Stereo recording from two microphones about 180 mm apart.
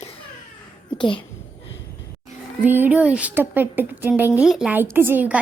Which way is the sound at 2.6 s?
10° right (ahead or behind).